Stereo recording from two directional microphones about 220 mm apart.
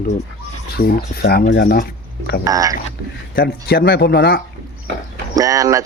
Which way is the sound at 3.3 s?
45° left (ahead or behind).